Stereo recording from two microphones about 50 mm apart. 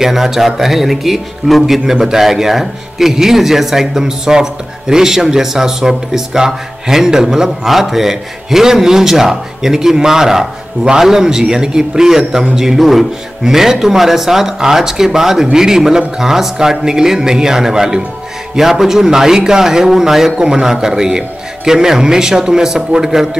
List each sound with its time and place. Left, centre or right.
0.0 s speech: centre